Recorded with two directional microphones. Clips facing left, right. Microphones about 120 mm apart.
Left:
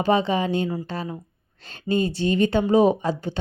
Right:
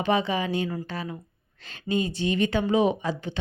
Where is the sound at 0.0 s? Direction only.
30° left (ahead or behind).